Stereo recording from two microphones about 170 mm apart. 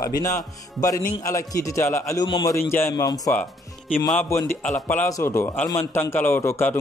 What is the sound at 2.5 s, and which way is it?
Speech, 15° left (ahead or behind).